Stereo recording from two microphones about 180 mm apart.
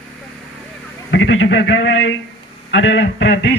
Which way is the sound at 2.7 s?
90° left.